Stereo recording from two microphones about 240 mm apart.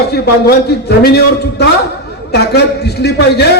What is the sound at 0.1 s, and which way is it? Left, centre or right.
A man's voice, left.